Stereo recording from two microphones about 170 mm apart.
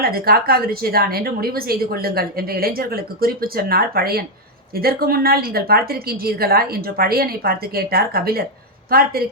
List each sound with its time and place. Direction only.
0.0 s a woman's voice: 60° right (ahead or behind)